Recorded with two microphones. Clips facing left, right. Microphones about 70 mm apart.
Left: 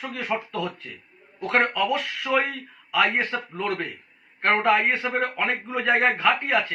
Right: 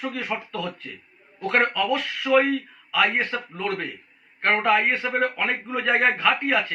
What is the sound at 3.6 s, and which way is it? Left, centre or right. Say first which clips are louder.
A man's voice: left 1 dB; left.